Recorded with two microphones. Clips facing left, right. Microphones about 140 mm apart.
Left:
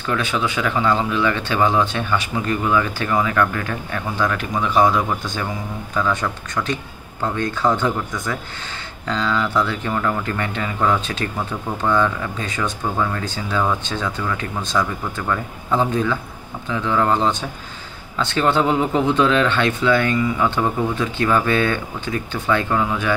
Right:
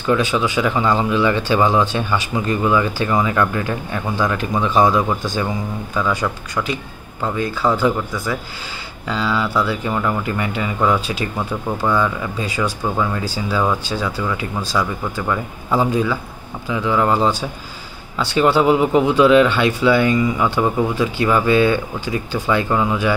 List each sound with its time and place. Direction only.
0.1 s speech: 15° right (ahead or behind)